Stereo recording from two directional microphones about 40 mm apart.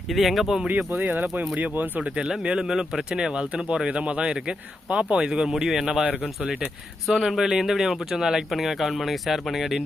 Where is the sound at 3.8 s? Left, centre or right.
Right.